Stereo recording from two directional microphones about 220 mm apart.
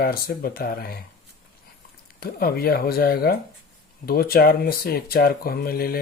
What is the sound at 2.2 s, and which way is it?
Speech, 45° left (ahead or behind).